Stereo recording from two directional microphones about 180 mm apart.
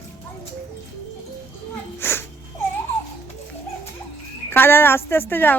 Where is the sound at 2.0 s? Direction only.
15° left (ahead or behind).